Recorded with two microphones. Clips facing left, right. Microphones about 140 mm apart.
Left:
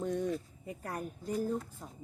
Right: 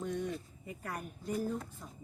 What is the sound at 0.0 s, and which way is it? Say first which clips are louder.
Speech: left 4 dB; 35° left (ahead or behind).